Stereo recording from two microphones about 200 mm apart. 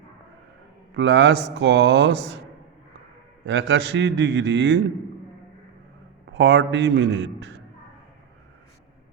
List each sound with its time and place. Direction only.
0.9 s a man's voice: 65° right (ahead or behind)
3.4 s a man's voice: 65° right (ahead or behind)
6.3 s a man's voice: 65° right (ahead or behind)